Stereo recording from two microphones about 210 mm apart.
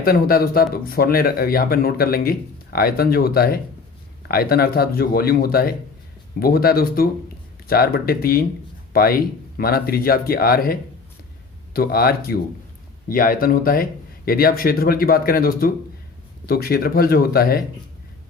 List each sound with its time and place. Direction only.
0.0 s speech: 45° left (ahead or behind)